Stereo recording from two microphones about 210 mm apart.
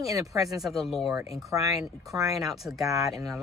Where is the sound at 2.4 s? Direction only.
Centre (ahead or behind).